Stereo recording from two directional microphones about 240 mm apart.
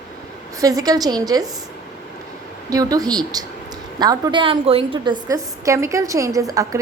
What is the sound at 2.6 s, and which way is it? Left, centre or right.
A woman's voice, centre.